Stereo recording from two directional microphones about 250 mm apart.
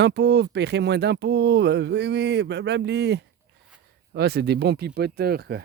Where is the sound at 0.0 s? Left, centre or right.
Right.